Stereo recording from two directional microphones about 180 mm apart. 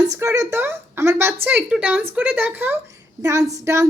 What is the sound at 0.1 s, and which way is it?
A woman's voice, 15° right (ahead or behind).